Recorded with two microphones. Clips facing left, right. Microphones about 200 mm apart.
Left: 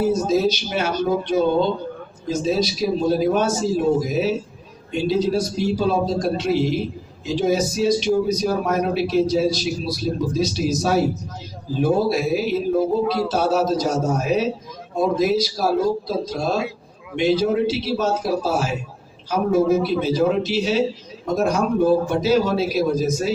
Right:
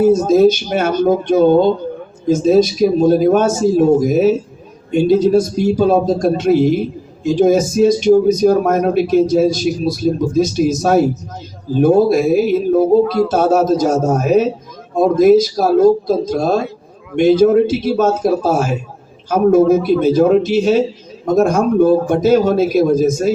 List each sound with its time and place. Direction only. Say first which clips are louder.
0.0 s speech: right 9 dB; 50° right (ahead or behind)